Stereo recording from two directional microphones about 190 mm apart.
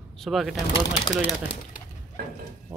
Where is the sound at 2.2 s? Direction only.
50° right (ahead or behind).